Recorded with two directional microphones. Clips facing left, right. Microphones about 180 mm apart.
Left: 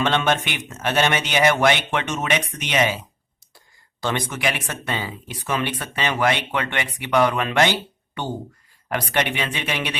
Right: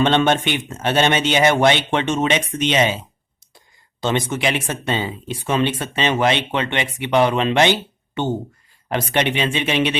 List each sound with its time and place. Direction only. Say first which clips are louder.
0.0 s speech: right 4 dB; 30° right (ahead or behind)